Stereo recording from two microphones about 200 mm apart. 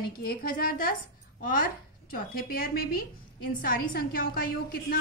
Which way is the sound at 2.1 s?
45° left (ahead or behind).